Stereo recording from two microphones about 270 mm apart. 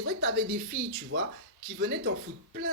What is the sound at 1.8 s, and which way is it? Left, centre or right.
Speech, right.